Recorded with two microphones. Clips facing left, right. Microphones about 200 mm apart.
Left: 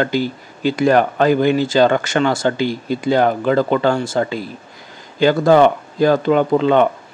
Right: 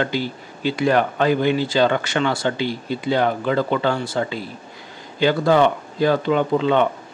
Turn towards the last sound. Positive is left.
turn(degrees=50)  # may be behind; listen again after turning